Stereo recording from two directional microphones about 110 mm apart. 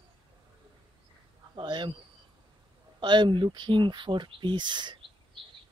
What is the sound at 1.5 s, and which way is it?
Speech, 45° right (ahead or behind).